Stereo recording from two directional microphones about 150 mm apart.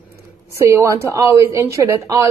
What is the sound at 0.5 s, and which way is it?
A woman's voice, 20° right (ahead or behind).